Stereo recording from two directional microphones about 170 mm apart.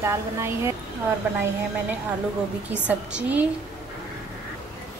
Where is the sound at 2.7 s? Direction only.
10° right (ahead or behind).